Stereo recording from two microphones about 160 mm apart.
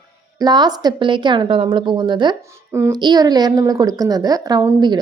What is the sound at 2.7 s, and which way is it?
Speech, 15° right (ahead or behind).